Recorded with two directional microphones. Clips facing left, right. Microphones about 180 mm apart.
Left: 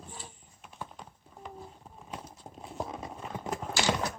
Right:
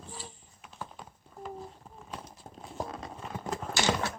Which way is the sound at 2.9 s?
15° left (ahead or behind).